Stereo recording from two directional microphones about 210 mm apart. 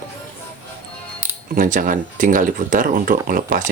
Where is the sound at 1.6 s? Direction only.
40° right (ahead or behind).